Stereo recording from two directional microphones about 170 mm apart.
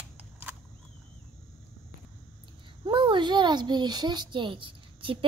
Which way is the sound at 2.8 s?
30° right (ahead or behind).